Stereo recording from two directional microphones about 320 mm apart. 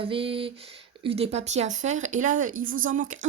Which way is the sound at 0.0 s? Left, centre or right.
Centre.